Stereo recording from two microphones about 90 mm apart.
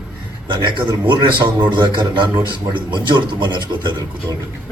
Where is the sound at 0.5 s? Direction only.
65° right (ahead or behind).